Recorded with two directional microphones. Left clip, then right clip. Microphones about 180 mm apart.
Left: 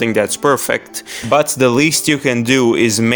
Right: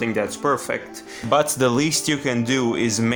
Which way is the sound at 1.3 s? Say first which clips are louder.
Left 6 dB; 40° left (ahead or behind).